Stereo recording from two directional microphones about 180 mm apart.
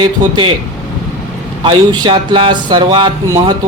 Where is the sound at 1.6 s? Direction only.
25° right (ahead or behind).